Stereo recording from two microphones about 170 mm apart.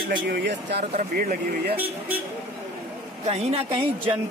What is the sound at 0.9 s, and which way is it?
Speech, 55° right (ahead or behind).